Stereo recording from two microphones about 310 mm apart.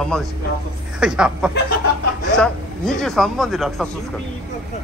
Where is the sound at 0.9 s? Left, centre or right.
Centre.